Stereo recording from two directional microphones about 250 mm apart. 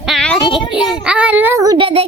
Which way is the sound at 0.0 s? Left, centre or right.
Centre.